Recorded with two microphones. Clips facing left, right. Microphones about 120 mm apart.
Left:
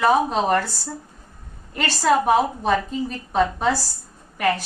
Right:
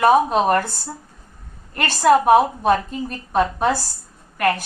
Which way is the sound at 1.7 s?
50° right (ahead or behind).